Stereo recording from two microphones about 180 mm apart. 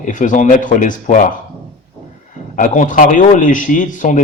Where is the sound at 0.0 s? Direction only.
45° left (ahead or behind).